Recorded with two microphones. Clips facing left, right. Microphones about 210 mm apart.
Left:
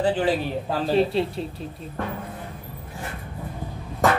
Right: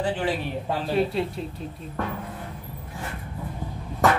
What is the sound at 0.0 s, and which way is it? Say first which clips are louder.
A man's voice: left 4 dB; 30° left (ahead or behind).